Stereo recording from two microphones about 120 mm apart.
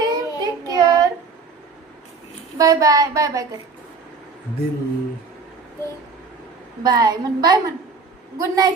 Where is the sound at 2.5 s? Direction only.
30° right (ahead or behind).